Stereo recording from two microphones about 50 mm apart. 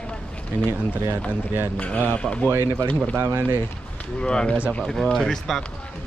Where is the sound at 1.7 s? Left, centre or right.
Left.